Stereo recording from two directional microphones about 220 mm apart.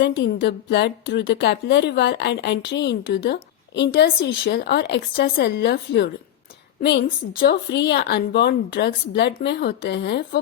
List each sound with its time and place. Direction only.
0.0 s speech: 50° left (ahead or behind)